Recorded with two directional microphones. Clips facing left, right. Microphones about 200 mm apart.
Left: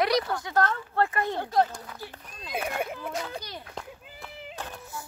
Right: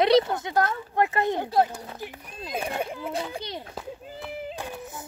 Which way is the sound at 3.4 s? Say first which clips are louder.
Right 6 dB; 25° right (ahead or behind).